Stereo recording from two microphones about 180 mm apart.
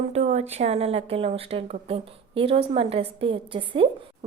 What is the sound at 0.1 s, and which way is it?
A woman's voice, 40° right (ahead or behind).